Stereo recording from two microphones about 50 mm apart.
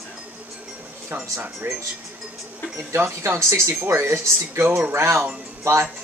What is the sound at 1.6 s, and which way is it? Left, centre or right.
Speech, right.